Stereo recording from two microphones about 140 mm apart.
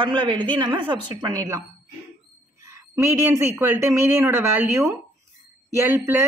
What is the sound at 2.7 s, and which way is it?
Speech, 20° right (ahead or behind).